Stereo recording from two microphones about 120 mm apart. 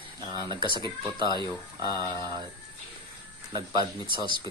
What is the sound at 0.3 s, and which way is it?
A man's voice, 35° right (ahead or behind).